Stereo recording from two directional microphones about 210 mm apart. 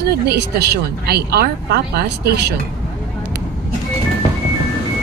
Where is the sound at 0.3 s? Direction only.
50° right (ahead or behind).